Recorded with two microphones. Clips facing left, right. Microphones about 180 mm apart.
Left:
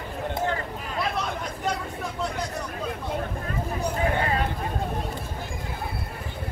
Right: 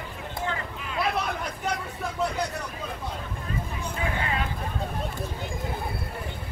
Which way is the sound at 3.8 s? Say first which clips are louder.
Left 7 dB; 40° left (ahead or behind).